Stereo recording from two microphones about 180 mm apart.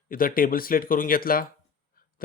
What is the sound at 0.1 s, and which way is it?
Speech, 50° left (ahead or behind).